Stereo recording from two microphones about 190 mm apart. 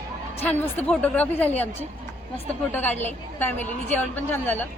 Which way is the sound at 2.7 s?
10° left (ahead or behind).